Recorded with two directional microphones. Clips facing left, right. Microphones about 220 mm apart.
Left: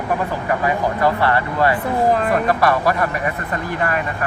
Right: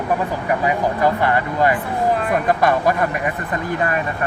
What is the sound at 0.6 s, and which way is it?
Speech, 15° right (ahead or behind).